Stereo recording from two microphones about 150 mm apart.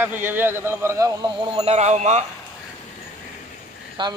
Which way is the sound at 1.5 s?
45° right (ahead or behind).